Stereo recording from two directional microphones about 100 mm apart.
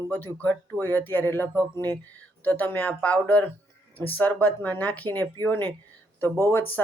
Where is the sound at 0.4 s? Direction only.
20° left (ahead or behind).